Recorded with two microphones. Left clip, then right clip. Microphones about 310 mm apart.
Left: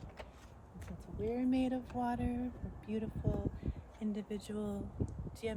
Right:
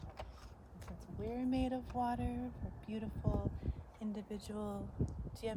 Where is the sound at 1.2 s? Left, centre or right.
Centre.